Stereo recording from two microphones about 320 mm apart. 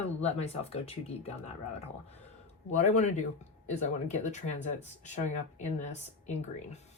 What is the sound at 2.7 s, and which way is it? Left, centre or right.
Speech, left.